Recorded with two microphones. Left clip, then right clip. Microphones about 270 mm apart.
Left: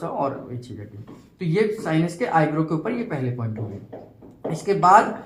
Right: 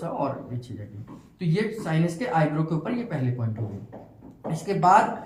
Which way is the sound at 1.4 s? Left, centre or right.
Centre.